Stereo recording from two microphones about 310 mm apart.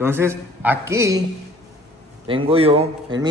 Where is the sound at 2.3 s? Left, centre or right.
Centre.